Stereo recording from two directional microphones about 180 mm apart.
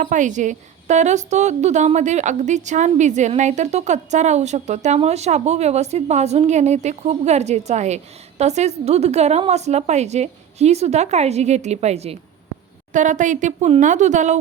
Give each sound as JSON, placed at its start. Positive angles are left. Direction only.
{"t": 0.0, "sound": "a woman's voice", "side_deg": -45}